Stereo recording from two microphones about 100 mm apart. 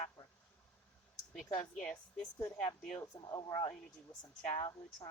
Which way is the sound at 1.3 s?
Centre (ahead or behind).